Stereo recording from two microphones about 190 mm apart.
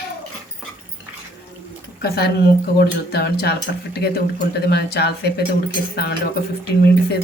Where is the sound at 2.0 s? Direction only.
55° left (ahead or behind).